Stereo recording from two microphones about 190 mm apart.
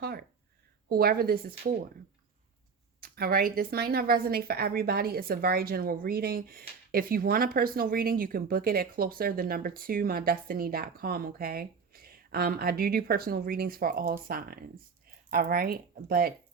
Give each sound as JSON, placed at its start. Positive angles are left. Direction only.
{"t": 0.0, "sound": "a sound", "side_deg": -55}
{"t": 0.9, "sound": "a woman's voice", "side_deg": -55}
{"t": 3.0, "sound": "a woman's voice", "side_deg": -50}